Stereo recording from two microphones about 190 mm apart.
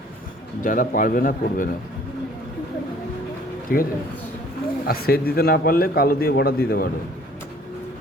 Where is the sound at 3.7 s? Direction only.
50° left (ahead or behind).